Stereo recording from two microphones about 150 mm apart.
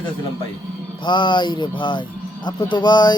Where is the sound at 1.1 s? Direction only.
30° left (ahead or behind).